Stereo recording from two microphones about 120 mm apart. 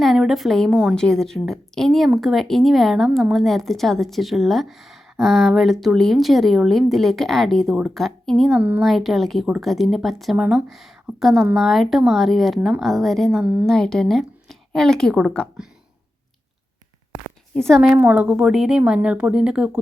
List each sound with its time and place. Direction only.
0.0 s speech: centre (ahead or behind)
8.5 s speech: 15° right (ahead or behind)
8.8 s speech: centre (ahead or behind)
13.4 s speech: 10° right (ahead or behind)
13.7 s speech: 5° left (ahead or behind)
17.5 s speech: 5° left (ahead or behind)
17.9 s speech: 10° right (ahead or behind)